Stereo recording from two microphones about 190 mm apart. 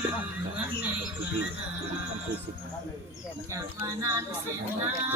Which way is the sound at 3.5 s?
15° right (ahead or behind).